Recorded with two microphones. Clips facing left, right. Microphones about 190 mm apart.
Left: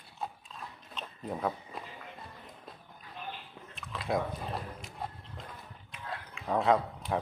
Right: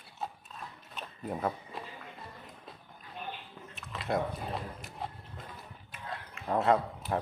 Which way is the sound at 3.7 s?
Centre (ahead or behind).